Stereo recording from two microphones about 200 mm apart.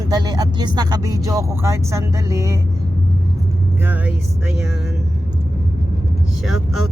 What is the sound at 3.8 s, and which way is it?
Speech, 10° right (ahead or behind).